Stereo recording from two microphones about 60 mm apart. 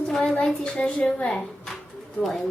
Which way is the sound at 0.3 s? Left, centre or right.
Centre.